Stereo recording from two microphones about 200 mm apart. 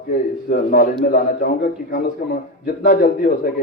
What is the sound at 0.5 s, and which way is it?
A man's voice, 45° left (ahead or behind).